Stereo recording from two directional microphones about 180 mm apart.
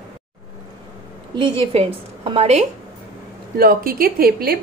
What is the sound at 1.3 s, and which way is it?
A woman's voice, 30° right (ahead or behind).